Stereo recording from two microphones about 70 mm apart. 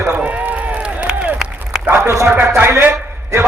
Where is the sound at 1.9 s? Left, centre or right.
Right.